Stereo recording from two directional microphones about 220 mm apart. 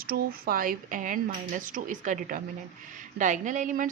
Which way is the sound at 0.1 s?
45° right (ahead or behind).